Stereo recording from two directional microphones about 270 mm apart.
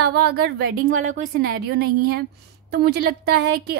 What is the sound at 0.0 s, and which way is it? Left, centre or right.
A woman's voice, right.